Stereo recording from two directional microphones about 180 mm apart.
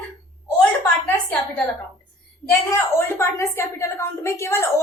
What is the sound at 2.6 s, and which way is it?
A woman's voice, 15° left (ahead or behind).